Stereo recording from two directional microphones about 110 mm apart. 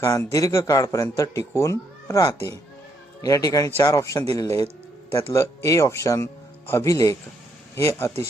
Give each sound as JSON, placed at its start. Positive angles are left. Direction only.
{"t": 0.0, "sound": "a man's voice", "side_deg": 30}